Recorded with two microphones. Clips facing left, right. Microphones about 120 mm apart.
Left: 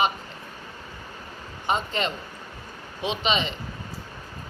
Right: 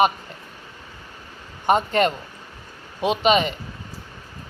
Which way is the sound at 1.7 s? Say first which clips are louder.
Right 8 dB; 55° right (ahead or behind).